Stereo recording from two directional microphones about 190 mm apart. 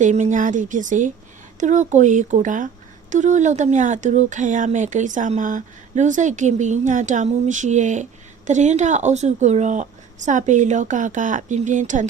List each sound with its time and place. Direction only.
0.0 s speech: 40° right (ahead or behind)